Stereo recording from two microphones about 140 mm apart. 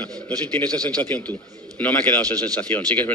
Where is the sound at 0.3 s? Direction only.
25° right (ahead or behind).